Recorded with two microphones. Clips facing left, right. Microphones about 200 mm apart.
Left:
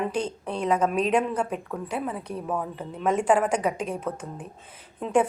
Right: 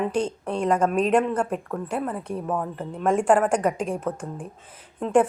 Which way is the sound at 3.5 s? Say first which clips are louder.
Right 3 dB; 5° left (ahead or behind).